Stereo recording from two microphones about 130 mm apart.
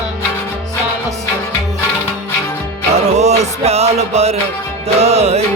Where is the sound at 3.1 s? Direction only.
60° right (ahead or behind).